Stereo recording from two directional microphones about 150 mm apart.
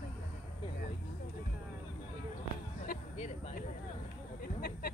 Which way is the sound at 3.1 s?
45° left (ahead or behind).